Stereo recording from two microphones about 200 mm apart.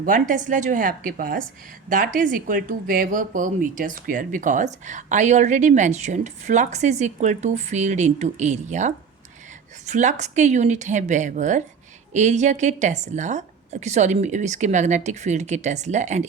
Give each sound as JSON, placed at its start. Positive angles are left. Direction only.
{"t": 0.0, "sound": "speech", "side_deg": -40}